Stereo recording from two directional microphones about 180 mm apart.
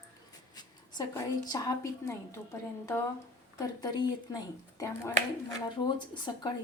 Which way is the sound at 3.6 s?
20° left (ahead or behind).